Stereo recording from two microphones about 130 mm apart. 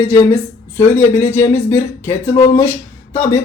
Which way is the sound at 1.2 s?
20° left (ahead or behind).